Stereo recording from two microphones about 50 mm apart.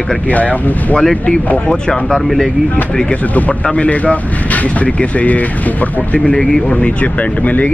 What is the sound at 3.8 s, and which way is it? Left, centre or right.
Speech, left.